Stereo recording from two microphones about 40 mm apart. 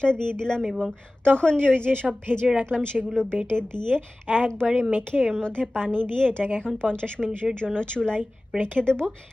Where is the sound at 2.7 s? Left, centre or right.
Left.